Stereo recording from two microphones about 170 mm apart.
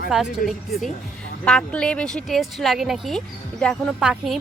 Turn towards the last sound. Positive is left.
turn(degrees=-5)  # may be behind; listen again after turning